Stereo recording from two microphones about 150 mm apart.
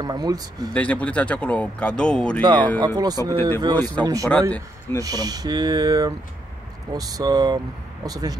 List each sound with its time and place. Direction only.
0.0 s speech: 25° right (ahead or behind)
0.7 s speech: 10° left (ahead or behind)
2.4 s speech: 30° right (ahead or behind)
3.7 s speech: 10° left (ahead or behind)
4.0 s speech: 25° right (ahead or behind)
4.3 s speech: 10° left (ahead or behind)
5.0 s speech: 25° right (ahead or behind)